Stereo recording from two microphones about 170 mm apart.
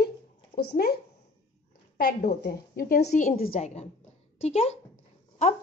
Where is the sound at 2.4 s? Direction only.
60° left (ahead or behind).